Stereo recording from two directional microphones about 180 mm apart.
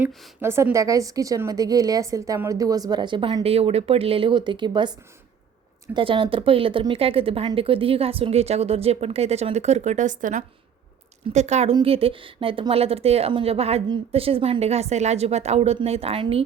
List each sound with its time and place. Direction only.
0.4 s a woman's voice: 15° right (ahead or behind); by 16.4 s 30° right (ahead or behind)